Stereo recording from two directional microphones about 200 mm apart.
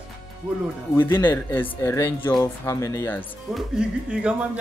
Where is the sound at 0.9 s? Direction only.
10° left (ahead or behind).